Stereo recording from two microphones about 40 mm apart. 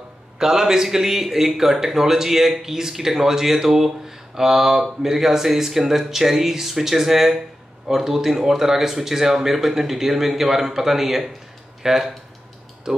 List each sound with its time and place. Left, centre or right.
0.4 s speech: centre